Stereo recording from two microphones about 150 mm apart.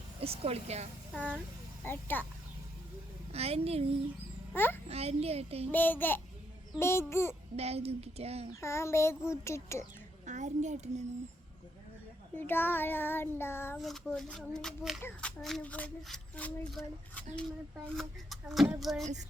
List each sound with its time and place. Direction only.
0.2 s a woman's voice: 40° right (ahead or behind)
1.1 s child singing: 10° left (ahead or behind)
3.3 s a woman's voice: 45° right (ahead or behind)
4.5 s child singing: 15° left (ahead or behind)
4.9 s a woman's voice: 45° right (ahead or behind)
5.7 s child singing: 10° left (ahead or behind)
7.5 s a woman's voice: 45° right (ahead or behind)
8.6 s child singing: 20° left (ahead or behind)
9.3 s speech: 20° left (ahead or behind)
10.2 s a woman's voice: 55° right (ahead or behind)
12.4 s child singing: 15° left (ahead or behind)
13.7 s a sound: centre (ahead or behind)